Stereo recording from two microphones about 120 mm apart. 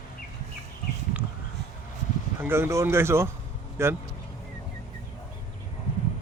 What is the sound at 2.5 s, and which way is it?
Speech, 20° right (ahead or behind).